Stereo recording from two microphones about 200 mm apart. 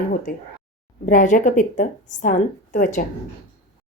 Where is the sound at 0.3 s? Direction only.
40° left (ahead or behind).